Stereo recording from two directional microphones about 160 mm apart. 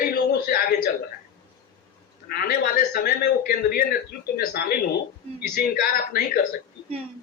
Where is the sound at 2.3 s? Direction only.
70° left (ahead or behind).